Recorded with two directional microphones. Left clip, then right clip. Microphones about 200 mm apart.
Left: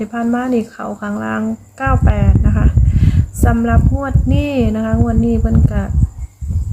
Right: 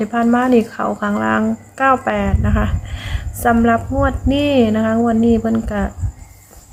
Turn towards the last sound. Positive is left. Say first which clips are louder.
# right 1 dB
turn(degrees=-10)  # may be behind; listen again after turning